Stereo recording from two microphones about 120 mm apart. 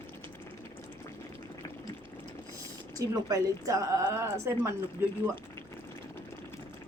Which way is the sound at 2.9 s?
30° right (ahead or behind).